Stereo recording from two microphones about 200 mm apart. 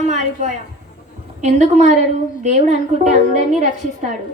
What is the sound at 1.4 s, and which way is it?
A woman's voice, 35° right (ahead or behind).